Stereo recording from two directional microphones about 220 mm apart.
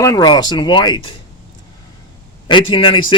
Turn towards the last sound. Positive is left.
turn(degrees=25)  # may be behind; listen again after turning